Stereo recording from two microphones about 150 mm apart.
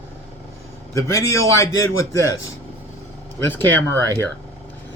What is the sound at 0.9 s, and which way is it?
Speech, 20° left (ahead or behind).